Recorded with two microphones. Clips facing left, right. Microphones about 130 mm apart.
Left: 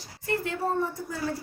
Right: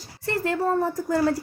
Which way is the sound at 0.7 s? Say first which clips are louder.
Right 5 dB; 80° right.